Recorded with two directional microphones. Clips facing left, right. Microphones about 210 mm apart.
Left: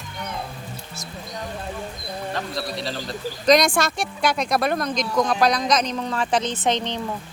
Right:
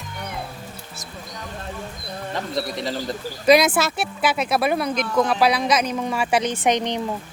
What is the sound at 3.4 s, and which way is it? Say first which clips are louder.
A woman's voice: right 2 dB; 5° right (ahead or behind).